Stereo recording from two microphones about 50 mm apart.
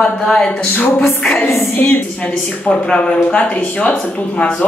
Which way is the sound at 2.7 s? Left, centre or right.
Centre.